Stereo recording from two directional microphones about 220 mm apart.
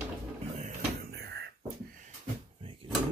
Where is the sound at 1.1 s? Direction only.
50° right (ahead or behind).